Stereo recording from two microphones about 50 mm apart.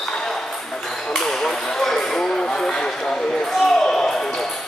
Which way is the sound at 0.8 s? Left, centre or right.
Centre.